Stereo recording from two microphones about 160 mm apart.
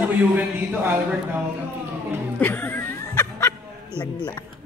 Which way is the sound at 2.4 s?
10° left (ahead or behind).